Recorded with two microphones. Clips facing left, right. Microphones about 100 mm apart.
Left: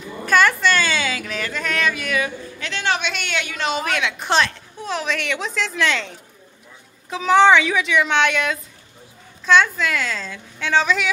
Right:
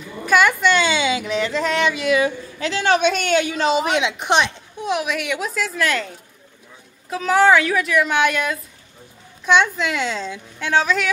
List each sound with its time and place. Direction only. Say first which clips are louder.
0.3 s a sound: right 1 dB; 10° right (ahead or behind); by 3.4 s 40° right (ahead or behind)
3.4 s a woman's voice: right 5 dB; 25° right (ahead or behind); by 8.5 s 5° right (ahead or behind)
9.5 s a woman's voice: even; 15° right (ahead or behind)
10.6 s a woman's voice: even; 10° right (ahead or behind)